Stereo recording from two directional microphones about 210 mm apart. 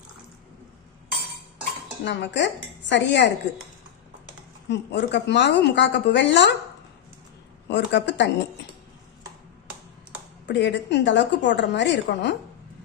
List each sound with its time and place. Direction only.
2.0 s a woman's voice: 55° left (ahead or behind)
4.7 s a woman's voice: 55° left (ahead or behind)
7.7 s a woman's voice: 60° left (ahead or behind)
10.4 s a woman's voice: 55° left (ahead or behind)